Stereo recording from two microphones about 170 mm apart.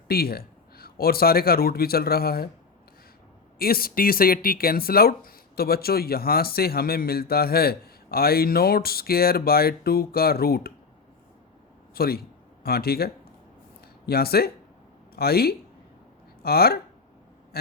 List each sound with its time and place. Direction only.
0.1 s speech: 65° left (ahead or behind)
3.6 s speech: 60° left (ahead or behind)
11.9 s speech: 60° left (ahead or behind)
14.1 s speech: 65° left (ahead or behind)